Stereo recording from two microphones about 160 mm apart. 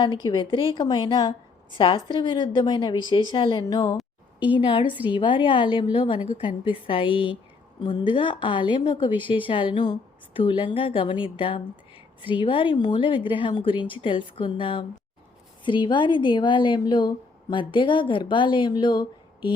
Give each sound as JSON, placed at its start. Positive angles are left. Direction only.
{"t": 0.0, "sound": "a woman's voice", "side_deg": 25}